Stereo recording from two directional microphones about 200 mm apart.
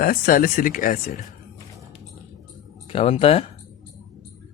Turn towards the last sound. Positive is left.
turn(degrees=30)  # may be behind; listen again after turning